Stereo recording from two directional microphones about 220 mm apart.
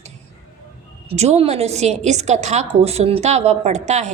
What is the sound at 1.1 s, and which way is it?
A woman's voice, 30° right (ahead or behind).